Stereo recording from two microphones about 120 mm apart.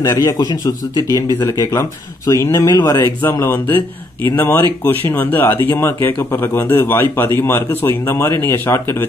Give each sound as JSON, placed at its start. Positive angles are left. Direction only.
{"t": 0.1, "sound": "speech", "side_deg": 25}